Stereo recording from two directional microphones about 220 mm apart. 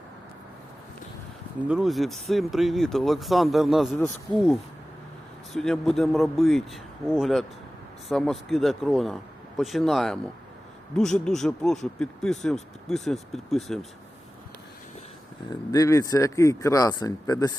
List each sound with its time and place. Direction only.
1.6 s speech: centre (ahead or behind)
5.5 s speech: centre (ahead or behind)
15.7 s speech: 15° left (ahead or behind)